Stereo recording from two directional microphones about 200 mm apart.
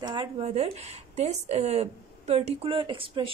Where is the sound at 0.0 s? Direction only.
25° right (ahead or behind).